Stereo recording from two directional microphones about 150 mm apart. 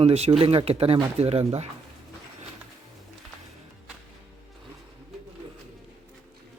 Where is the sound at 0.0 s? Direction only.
45° right (ahead or behind).